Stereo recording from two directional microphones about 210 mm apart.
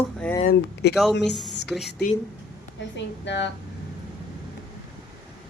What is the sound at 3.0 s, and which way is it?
Speech, 55° left (ahead or behind).